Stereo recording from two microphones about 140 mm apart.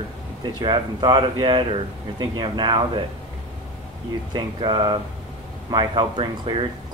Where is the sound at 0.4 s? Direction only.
30° right (ahead or behind).